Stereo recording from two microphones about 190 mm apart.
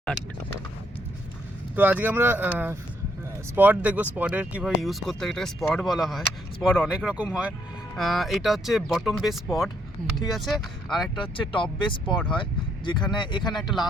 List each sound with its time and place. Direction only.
1.7 s speech: 10° right (ahead or behind)
11.1 s speech: 25° left (ahead or behind)
13.5 s speech: centre (ahead or behind)